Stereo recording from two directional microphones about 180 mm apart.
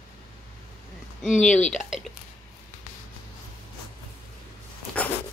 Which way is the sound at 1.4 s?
5° left (ahead or behind).